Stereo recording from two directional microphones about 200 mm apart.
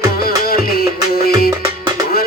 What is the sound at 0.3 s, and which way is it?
Music, 50° left (ahead or behind).